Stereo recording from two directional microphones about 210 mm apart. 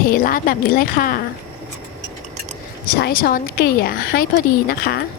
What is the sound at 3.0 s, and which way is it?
Speech, 45° left (ahead or behind).